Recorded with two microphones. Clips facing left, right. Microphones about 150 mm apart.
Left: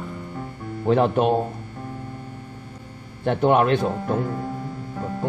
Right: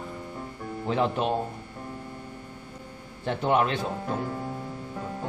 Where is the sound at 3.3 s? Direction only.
55° left (ahead or behind).